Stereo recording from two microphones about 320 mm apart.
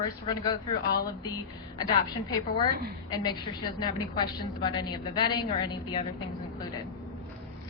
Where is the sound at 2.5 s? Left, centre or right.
Centre.